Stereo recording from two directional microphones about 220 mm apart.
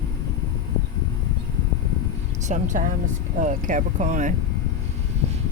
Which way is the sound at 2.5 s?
30° right (ahead or behind).